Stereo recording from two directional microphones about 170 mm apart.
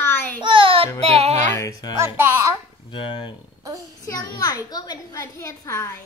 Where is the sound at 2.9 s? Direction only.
30° left (ahead or behind).